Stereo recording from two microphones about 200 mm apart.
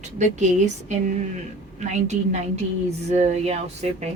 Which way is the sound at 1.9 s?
35° right (ahead or behind).